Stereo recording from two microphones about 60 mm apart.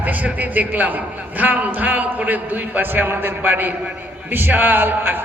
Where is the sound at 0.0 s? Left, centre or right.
Right.